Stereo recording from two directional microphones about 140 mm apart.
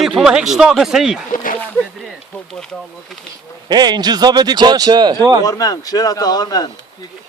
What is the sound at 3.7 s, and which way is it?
Speech, 30° right (ahead or behind).